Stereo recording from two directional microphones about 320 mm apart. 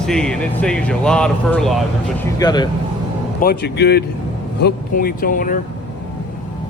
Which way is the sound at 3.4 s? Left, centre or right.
Left.